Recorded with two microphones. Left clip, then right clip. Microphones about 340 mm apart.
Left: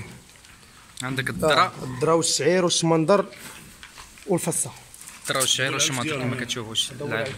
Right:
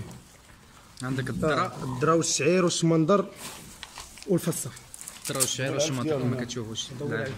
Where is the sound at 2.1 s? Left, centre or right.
Centre.